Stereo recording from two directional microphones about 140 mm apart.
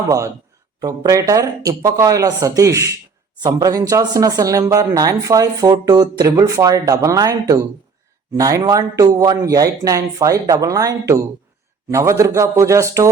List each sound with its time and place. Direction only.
0.8 s speech: 25° right (ahead or behind)